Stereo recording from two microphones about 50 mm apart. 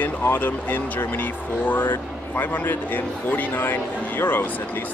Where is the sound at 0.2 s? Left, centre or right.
Left.